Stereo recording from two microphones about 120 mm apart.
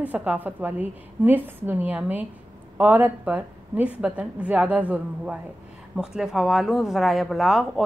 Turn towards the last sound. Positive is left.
turn(degrees=0)  # may be behind; listen again after turning